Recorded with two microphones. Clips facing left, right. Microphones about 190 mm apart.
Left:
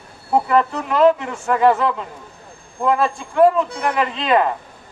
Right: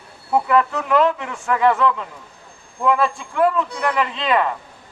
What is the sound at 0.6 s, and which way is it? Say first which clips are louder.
Speech: left 1 dB; 35° left (ahead or behind).